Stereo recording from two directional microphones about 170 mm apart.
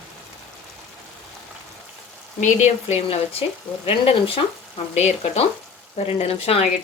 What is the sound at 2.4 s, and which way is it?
Speech, 45° left (ahead or behind).